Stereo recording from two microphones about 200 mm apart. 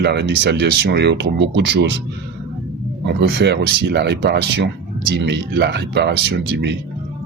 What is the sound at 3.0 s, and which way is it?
Speech, 60° right (ahead or behind).